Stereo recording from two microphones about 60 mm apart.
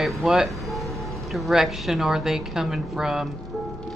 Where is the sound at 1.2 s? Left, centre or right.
Centre.